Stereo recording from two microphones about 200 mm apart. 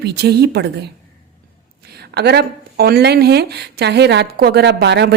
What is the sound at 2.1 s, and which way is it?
A woman's voice, 55° right (ahead or behind).